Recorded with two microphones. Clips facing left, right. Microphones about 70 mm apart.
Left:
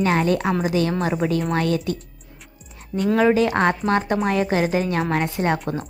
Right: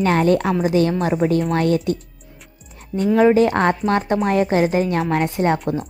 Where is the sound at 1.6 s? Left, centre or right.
Right.